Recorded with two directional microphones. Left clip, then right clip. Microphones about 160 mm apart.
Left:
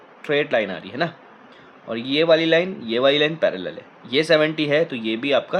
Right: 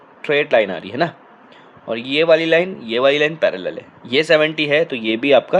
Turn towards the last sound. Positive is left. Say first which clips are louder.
# right 7 dB
turn(degrees=-30)  # may be behind; listen again after turning